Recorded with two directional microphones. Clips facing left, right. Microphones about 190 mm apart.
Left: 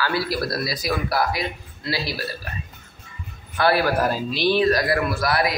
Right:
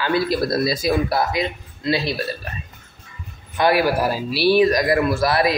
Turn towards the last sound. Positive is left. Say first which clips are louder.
# right 4 dB
turn(degrees=-25)  # may be behind; listen again after turning